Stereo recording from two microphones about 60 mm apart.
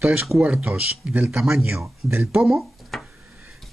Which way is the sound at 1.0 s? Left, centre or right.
Centre.